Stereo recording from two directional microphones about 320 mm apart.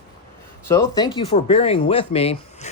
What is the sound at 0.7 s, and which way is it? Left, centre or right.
A man's voice, centre.